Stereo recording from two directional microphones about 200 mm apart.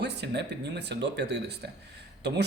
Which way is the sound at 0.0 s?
55° right (ahead or behind).